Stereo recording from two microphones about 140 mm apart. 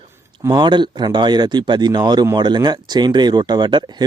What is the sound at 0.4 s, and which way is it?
Speech, 30° right (ahead or behind).